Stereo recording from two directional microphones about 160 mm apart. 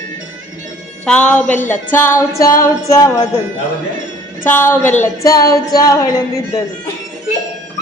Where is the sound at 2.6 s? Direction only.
20° left (ahead or behind).